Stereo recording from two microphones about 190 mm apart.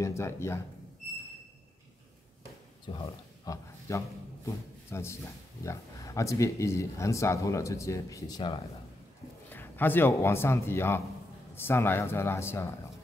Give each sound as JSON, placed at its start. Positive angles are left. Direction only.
{"t": 0.0, "sound": "speech", "side_deg": 15}
{"t": 2.9, "sound": "a man's voice", "side_deg": 20}
{"t": 9.5, "sound": "speech", "side_deg": 10}